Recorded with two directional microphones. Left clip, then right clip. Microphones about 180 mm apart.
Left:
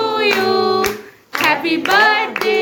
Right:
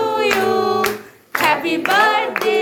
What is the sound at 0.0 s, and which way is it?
Choir, 40° left (ahead or behind).